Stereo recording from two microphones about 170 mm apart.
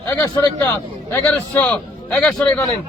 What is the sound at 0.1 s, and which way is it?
A man's voice, 15° left (ahead or behind).